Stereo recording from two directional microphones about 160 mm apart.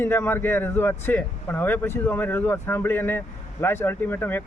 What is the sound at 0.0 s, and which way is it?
Speech, 15° left (ahead or behind).